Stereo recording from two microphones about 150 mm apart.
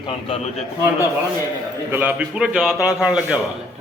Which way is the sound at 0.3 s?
45° left (ahead or behind).